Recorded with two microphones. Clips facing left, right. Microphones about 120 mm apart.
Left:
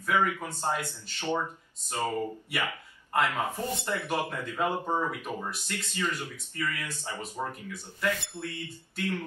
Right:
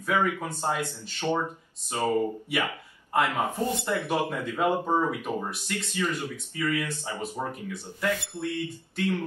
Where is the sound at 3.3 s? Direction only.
15° right (ahead or behind).